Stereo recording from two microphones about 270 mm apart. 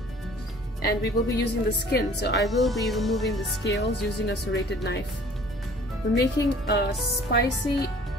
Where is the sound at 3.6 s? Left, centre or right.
Left.